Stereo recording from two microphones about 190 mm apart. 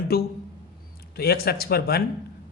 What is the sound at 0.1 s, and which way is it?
A man's voice, 55° left (ahead or behind).